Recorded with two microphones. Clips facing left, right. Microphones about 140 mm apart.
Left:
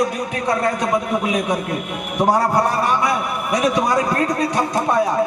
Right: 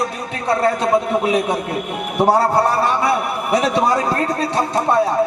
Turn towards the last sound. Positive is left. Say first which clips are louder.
# right 1 dB
turn(degrees=-30)  # may be behind; listen again after turning